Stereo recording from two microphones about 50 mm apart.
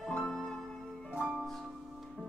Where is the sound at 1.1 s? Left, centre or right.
Right.